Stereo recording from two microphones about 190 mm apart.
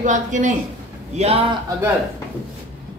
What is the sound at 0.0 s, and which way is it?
Speech, 40° right (ahead or behind).